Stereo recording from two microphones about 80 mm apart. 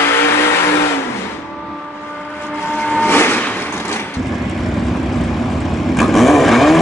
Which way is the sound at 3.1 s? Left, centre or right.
Left.